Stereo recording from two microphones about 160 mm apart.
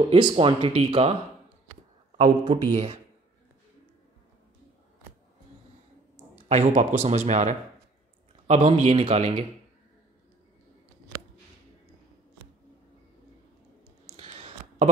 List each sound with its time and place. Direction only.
0.1 s speech: 35° right (ahead or behind)
2.2 s speech: 30° right (ahead or behind)
6.3 s a man's voice: 45° right (ahead or behind)
14.1 s a sound: 40° right (ahead or behind)